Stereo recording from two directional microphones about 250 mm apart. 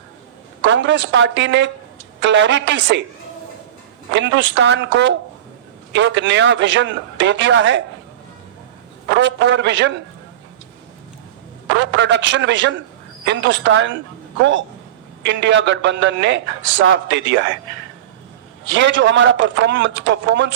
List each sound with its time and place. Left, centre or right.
0.6 s speech: right
4.1 s speech: right
9.0 s speech: right
11.7 s speech: right
15.3 s speech: right
18.7 s speech: right